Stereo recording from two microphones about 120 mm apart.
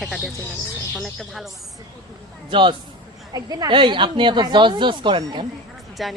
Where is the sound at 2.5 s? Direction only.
45° right (ahead or behind).